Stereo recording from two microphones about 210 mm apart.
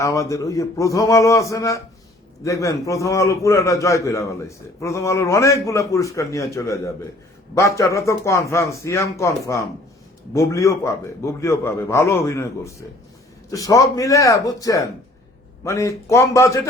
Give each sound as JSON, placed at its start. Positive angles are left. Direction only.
{"t": 0.0, "sound": "a man's voice", "side_deg": 15}